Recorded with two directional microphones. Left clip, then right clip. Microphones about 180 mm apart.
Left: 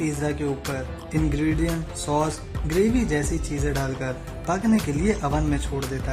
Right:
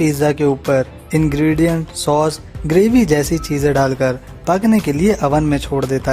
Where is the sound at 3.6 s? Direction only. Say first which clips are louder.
Right 15 dB; 50° right (ahead or behind).